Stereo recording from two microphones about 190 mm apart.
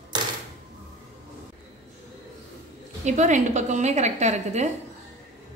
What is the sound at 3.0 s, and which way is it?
A woman's voice, 40° right (ahead or behind).